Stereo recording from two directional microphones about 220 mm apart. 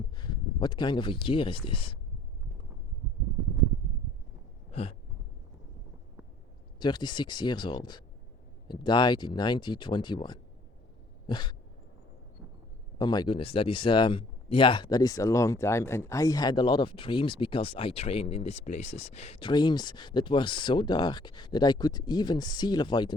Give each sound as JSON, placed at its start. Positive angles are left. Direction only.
{"t": 0.2, "sound": "speech", "side_deg": 20}
{"t": 4.7, "sound": "a sound", "side_deg": 25}
{"t": 6.7, "sound": "speech", "side_deg": 20}
{"t": 13.0, "sound": "speech", "side_deg": 20}